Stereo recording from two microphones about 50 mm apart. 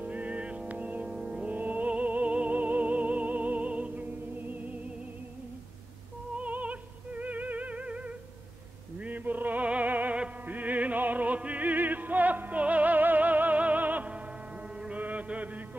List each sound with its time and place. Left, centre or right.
0.0 s music: right
1.0 s music: centre
1.5 s music: right
6.3 s music: right
15.0 s mantra: right